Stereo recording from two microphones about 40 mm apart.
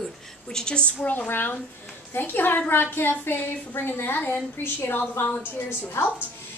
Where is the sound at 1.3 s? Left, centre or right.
Left.